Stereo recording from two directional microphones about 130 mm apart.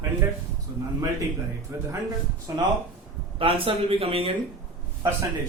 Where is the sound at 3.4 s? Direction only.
45° right (ahead or behind).